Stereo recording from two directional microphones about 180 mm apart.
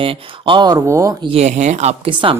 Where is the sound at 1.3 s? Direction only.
40° right (ahead or behind).